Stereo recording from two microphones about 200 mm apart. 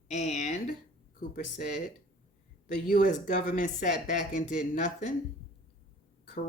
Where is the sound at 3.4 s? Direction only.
40° left (ahead or behind).